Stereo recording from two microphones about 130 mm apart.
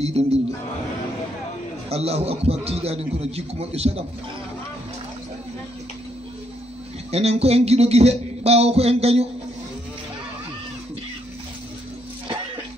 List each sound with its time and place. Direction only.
0.0 s a man's voice: 55° right (ahead or behind)
1.9 s a man's voice: 50° right (ahead or behind)
7.1 s a man's voice: 55° right (ahead or behind)